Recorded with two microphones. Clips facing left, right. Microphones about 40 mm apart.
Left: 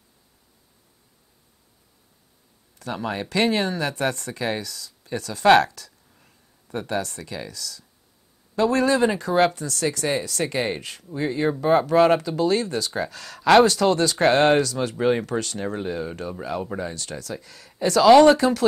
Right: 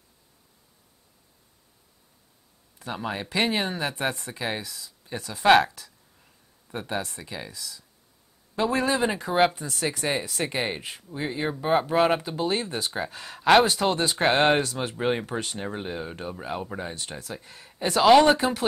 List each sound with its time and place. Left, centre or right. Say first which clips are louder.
2.8 s speech: left 3 dB; centre
18.0 s speech: left 4 dB; centre
18.4 s speech: left 5 dB; right